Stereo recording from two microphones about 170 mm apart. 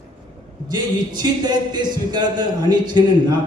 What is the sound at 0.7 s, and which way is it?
Speech, 25° right (ahead or behind).